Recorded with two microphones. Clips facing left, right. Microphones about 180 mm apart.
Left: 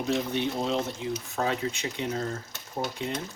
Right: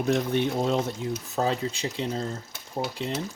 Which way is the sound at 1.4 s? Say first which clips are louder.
Right 3 dB; 35° right (ahead or behind).